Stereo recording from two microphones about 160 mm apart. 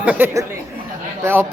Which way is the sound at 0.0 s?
10° right (ahead or behind).